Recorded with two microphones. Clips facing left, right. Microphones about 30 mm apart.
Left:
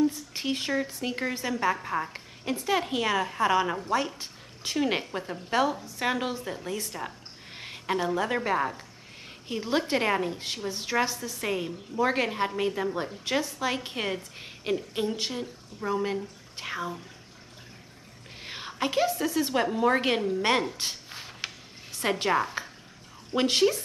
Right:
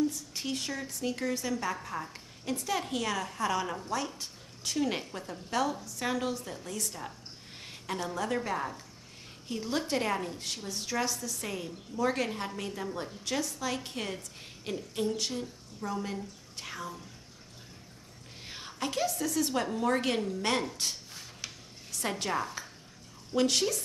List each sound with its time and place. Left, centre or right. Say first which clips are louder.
0.0 s speech: left 5 dB; left
18.4 s speech: left 6 dB; left
21.1 s a sound: left 6 dB; left
21.9 s a woman's voice: left 7 dB; left